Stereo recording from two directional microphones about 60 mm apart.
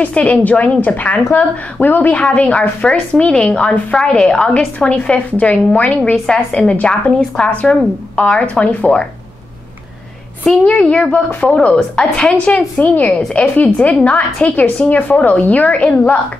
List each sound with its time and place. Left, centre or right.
0.0 s a woman's voice: left
10.6 s a woman's voice: centre